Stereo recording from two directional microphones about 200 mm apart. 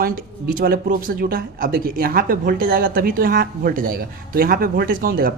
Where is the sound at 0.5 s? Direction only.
45° right (ahead or behind).